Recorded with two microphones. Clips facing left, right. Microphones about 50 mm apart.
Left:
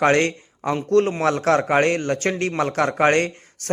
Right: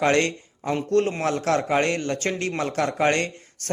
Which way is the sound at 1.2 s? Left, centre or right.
Left.